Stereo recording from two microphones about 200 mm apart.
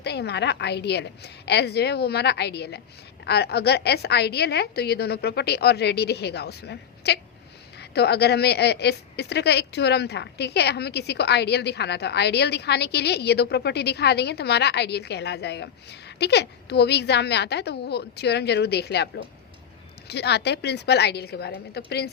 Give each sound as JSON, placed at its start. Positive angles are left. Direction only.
{"t": 0.0, "sound": "a woman's voice", "side_deg": 55}